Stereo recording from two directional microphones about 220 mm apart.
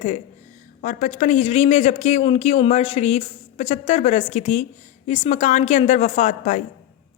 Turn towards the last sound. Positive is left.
turn(degrees=35)  # may be behind; listen again after turning